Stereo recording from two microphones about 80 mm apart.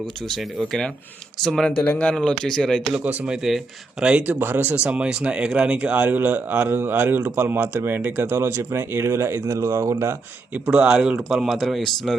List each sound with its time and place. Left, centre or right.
0.2 s speech: centre
1.8 s speech: centre
2.9 s speech: centre; by 10.2 s right
10.5 s speech: centre